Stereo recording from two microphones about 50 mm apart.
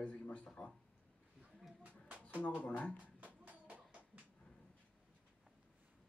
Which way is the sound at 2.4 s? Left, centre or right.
Left.